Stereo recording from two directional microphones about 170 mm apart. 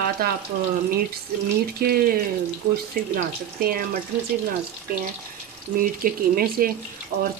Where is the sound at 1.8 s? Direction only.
60° right (ahead or behind).